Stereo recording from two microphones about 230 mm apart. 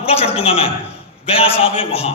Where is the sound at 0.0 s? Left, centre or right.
Left.